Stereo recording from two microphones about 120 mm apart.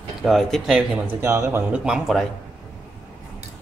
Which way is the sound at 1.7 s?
5° right (ahead or behind).